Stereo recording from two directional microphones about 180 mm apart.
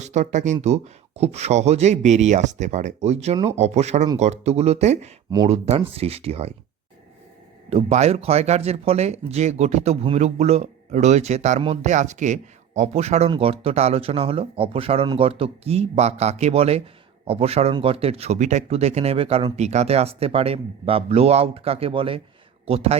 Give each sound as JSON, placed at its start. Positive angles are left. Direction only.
{"t": 0.0, "sound": "speech", "side_deg": -40}
{"t": 7.7, "sound": "speech", "side_deg": -35}